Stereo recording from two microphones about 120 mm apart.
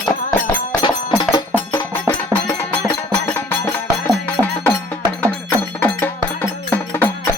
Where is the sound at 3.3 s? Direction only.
20° left (ahead or behind).